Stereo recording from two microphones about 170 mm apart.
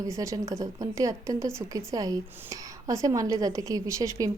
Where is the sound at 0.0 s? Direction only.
20° right (ahead or behind).